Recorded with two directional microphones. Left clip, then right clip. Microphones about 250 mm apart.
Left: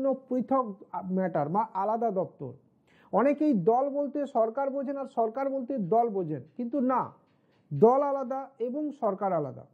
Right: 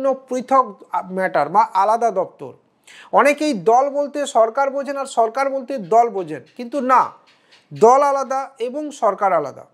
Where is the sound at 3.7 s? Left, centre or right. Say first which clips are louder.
Right 11 dB; centre.